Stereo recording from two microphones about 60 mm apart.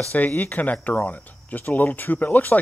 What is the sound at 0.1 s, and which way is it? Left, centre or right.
Speech, left.